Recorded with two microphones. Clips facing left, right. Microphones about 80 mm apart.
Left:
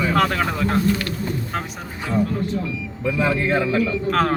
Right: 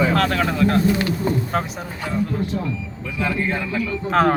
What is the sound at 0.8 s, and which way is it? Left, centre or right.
Speech, right.